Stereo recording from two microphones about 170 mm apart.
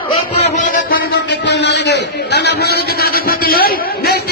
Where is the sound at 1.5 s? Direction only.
90° left; by 4.2 s 65° left (ahead or behind).